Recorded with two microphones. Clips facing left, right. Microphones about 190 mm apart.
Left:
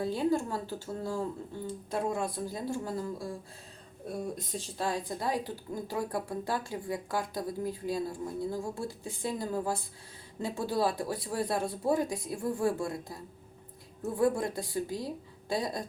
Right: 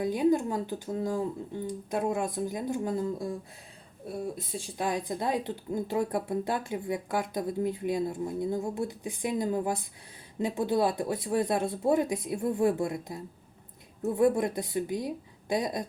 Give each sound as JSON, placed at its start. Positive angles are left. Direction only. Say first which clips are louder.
{"t": 0.0, "sound": "speech", "louder": "right 4 dB", "side_deg": -15}
{"t": 4.1, "sound": "speech", "louder": "right 1 dB", "side_deg": -10}
{"t": 14.2, "sound": "speech", "louder": "right 3 dB", "side_deg": -20}